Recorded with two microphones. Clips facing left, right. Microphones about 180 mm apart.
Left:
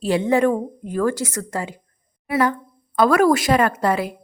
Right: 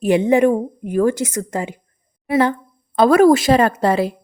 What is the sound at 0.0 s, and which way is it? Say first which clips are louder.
A woman's voice: right 4 dB; 15° right (ahead or behind).